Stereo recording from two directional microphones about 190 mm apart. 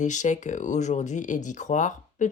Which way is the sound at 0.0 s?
40° left (ahead or behind).